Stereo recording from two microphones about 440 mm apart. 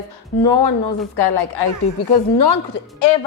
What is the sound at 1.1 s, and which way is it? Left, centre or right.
A woman's voice, left.